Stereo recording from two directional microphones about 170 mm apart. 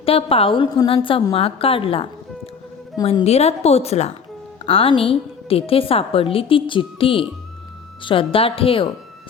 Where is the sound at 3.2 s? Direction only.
40° left (ahead or behind).